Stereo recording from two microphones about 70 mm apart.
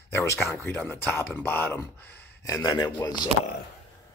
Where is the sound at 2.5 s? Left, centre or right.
Left.